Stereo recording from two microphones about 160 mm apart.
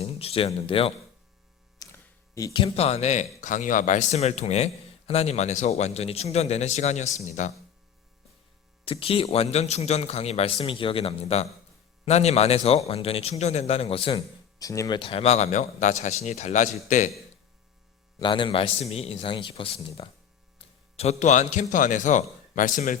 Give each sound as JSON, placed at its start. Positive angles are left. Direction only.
{"t": 0.0, "sound": "speech", "side_deg": 40}
{"t": 1.8, "sound": "hum", "side_deg": 20}
{"t": 2.3, "sound": "speech", "side_deg": 25}
{"t": 8.8, "sound": "speech", "side_deg": 35}
{"t": 14.6, "sound": "speech", "side_deg": 20}
{"t": 18.2, "sound": "speech", "side_deg": 30}